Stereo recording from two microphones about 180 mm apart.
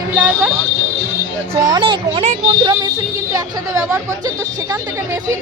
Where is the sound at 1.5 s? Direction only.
20° right (ahead or behind).